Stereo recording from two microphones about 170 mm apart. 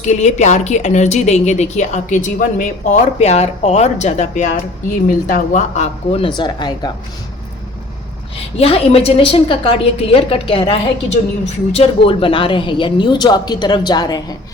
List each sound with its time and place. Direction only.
0.0 s a woman's voice: 40° left (ahead or behind); by 6.9 s 25° left (ahead or behind)
8.5 s a woman's voice: 35° left (ahead or behind)